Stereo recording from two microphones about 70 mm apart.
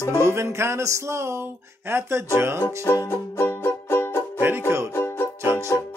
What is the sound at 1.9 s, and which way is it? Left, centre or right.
Speech, right.